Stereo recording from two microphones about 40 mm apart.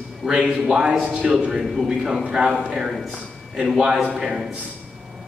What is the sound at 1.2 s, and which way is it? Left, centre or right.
Speech, right.